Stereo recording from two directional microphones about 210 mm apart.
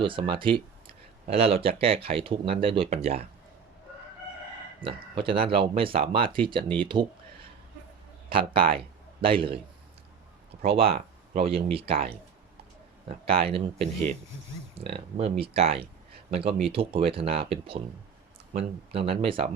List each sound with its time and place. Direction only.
0.0 s speech: 25° right (ahead or behind)
4.8 s speech: 25° right (ahead or behind)
8.3 s a man's voice: 25° right (ahead or behind)
10.6 s speech: 30° right (ahead or behind)
13.1 s speech: 25° right (ahead or behind)